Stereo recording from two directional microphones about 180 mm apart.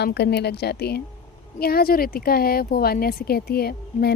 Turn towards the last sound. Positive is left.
turn(degrees=60)  # may be behind; listen again after turning